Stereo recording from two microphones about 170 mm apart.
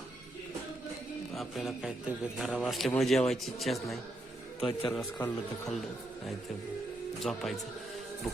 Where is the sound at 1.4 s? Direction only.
Centre (ahead or behind).